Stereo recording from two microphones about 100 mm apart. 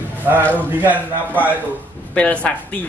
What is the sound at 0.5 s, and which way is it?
Speech, 15° right (ahead or behind).